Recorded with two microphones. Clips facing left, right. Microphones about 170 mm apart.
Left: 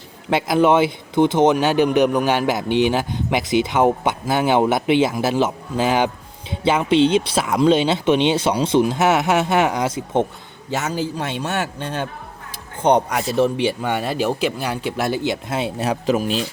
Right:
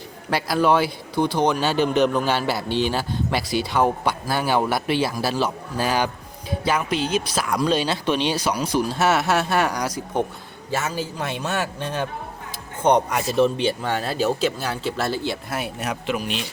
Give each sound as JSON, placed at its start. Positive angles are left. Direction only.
{"t": 0.3, "sound": "speech", "side_deg": 20}
{"t": 12.8, "sound": "speech", "side_deg": 10}